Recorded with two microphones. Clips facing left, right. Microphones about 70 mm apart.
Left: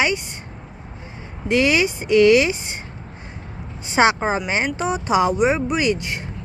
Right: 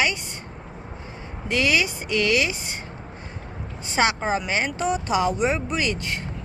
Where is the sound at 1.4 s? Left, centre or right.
Left.